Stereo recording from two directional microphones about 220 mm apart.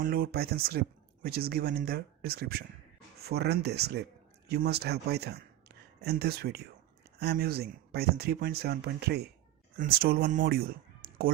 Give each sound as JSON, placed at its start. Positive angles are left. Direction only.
{"t": 0.0, "sound": "speech", "side_deg": -40}